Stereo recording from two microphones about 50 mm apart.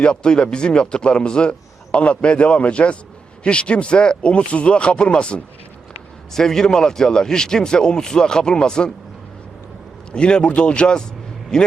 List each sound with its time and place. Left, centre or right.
0.0 s a man's voice: centre
10.1 s a man's voice: centre